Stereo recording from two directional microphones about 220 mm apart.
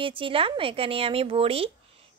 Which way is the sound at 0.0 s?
25° right (ahead or behind).